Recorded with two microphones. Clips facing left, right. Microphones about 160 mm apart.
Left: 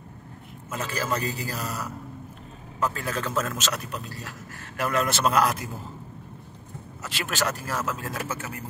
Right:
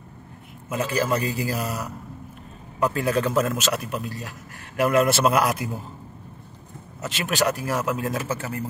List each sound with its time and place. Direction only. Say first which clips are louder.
0.7 s a man's voice: right 6 dB; 15° right (ahead or behind)
7.0 s a man's voice: right 5 dB; 20° right (ahead or behind)